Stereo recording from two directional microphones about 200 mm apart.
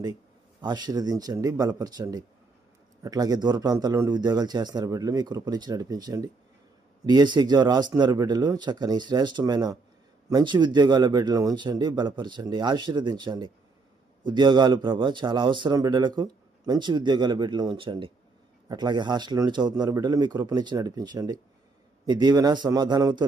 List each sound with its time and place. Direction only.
0.6 s a man's voice: 20° right (ahead or behind)